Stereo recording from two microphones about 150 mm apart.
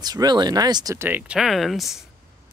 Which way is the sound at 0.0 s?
25° right (ahead or behind).